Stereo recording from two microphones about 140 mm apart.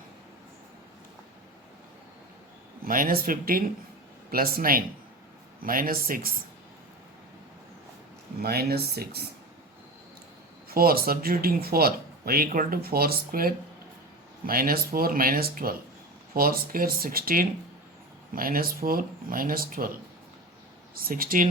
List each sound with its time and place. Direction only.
2.8 s speech: 85° right
8.4 s speech: 90° right
10.7 s speech: 90° right